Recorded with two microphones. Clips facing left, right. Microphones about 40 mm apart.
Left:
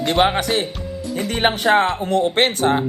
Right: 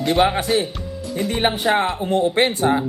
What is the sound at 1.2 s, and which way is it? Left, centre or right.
Speech, left.